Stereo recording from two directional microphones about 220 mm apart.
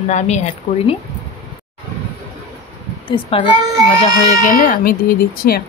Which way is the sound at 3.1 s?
25° left (ahead or behind).